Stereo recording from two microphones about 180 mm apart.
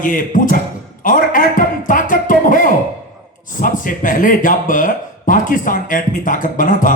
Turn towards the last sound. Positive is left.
turn(degrees=45)  # may be behind; listen again after turning